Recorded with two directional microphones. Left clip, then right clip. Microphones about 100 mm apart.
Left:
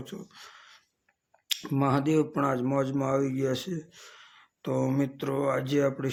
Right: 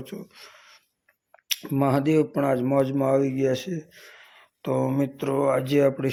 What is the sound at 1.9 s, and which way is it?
Speech, 25° right (ahead or behind).